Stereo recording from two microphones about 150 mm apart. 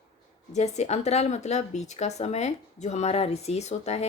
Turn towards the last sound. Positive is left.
turn(degrees=45)  # may be behind; listen again after turning